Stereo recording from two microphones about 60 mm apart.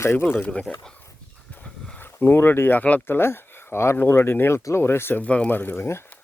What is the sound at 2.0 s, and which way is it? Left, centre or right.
Speech, left.